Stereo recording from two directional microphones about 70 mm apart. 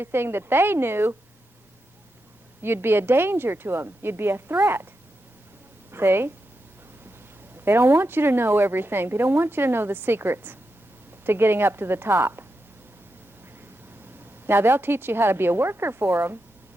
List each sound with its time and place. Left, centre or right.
0.0 s speech: right
2.6 s speech: right
5.9 s a woman's voice: right
7.5 s speech: right
14.4 s speech: right